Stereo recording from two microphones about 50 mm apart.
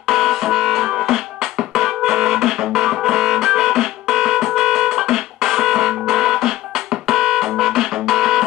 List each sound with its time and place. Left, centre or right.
0.1 s music: centre